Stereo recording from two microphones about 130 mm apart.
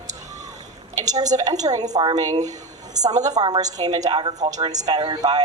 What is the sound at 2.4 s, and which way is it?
Speech, 65° right (ahead or behind).